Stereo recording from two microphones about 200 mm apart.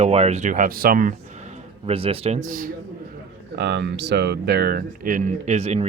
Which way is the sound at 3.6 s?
55° right (ahead or behind).